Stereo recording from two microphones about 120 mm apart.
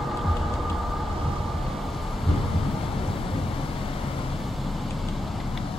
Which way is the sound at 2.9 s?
50° left (ahead or behind).